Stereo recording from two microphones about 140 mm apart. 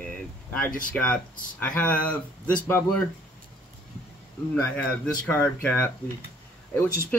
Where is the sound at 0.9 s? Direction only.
10° left (ahead or behind).